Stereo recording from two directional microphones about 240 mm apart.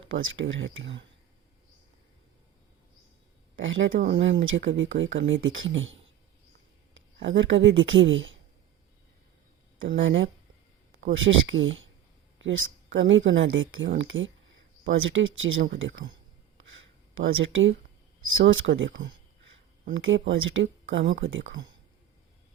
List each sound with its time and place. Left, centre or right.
0.1 s a woman's voice: right
3.6 s a woman's voice: right
3.9 s speech: right
4.2 s a woman's voice: right
9.9 s a woman's voice: right
17.2 s a woman's voice: right
19.9 s a woman's voice: right